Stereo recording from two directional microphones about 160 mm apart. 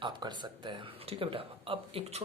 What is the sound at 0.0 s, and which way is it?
Speech, 30° right (ahead or behind).